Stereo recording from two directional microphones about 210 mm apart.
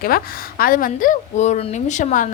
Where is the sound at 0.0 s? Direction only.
45° left (ahead or behind).